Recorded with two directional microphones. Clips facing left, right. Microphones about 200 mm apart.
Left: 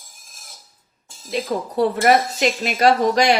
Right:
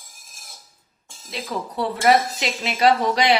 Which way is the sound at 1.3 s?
50° left (ahead or behind).